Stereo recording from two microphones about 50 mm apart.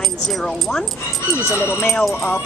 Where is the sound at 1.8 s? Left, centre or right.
Centre.